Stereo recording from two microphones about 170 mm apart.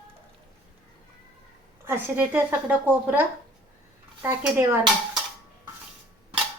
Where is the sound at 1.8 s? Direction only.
10° right (ahead or behind).